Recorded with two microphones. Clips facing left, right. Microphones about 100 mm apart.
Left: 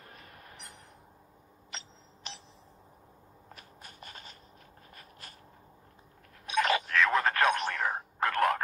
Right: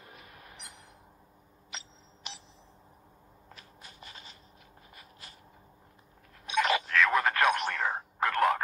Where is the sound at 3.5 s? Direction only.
45° left (ahead or behind).